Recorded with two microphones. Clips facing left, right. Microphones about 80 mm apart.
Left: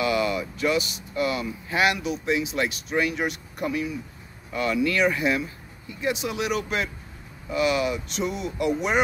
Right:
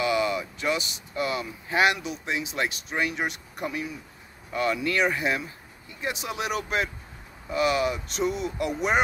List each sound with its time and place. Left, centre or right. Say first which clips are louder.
0.0 s speech: left 1 dB; right